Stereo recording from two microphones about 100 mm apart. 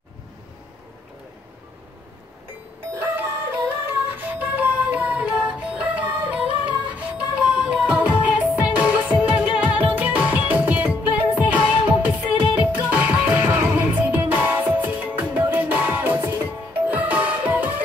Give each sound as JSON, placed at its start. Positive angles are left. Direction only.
{"t": 2.9, "sound": "music", "side_deg": -20}